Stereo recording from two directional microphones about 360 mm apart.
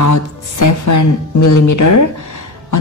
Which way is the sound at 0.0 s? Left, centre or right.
Left.